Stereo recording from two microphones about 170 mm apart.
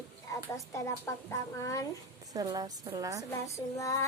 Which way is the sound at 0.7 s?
15° left (ahead or behind).